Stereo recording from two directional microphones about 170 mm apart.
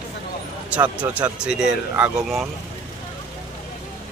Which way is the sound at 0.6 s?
10° right (ahead or behind).